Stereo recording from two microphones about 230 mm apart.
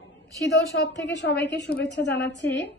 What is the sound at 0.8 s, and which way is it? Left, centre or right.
Speech, left.